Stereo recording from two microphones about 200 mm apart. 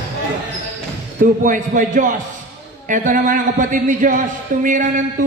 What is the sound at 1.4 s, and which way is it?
A man's voice, 40° right (ahead or behind).